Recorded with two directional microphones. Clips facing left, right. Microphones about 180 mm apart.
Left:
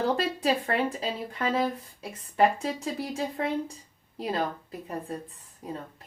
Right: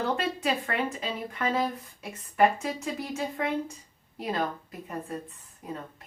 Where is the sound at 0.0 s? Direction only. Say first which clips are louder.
Left 2 dB; 35° left (ahead or behind).